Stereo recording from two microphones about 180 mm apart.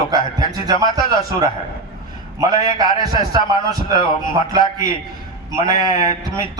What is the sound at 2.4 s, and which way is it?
A man's voice, 20° right (ahead or behind).